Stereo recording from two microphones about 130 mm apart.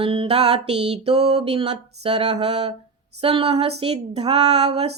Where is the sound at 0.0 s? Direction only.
45° right (ahead or behind).